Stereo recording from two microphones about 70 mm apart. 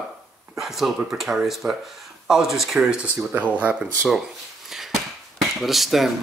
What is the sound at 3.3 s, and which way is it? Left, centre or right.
Speech, right.